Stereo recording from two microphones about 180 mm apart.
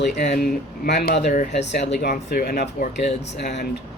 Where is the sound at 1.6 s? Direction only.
70° left (ahead or behind).